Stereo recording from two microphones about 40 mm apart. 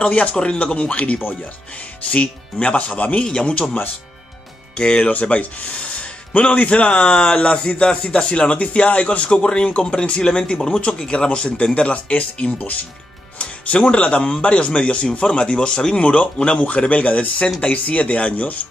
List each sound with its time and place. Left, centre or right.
0.1 s speech: left
3.2 s speech: left
4.7 s speech: left
5.1 s speech: left